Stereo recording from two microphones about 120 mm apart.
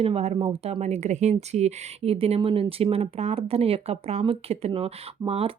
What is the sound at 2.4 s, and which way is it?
Speech, 45° right (ahead or behind).